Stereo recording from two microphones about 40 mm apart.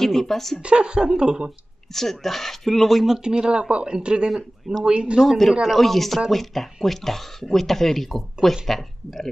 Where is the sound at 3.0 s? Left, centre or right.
Centre.